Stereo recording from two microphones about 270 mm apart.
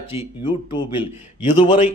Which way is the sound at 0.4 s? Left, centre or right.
Centre.